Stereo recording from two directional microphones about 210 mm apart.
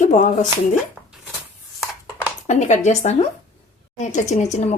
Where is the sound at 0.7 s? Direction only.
Centre (ahead or behind).